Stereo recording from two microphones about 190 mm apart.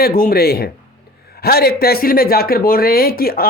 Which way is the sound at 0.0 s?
50° left (ahead or behind).